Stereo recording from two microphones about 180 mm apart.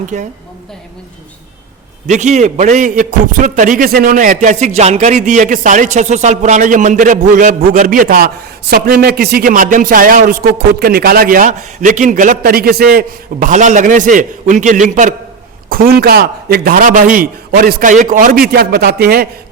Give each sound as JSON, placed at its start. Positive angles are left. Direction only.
{"t": 0.1, "sound": "a man's voice", "side_deg": -40}
{"t": 2.0, "sound": "a man's voice", "side_deg": -40}
{"t": 15.7, "sound": "a man's voice", "side_deg": -55}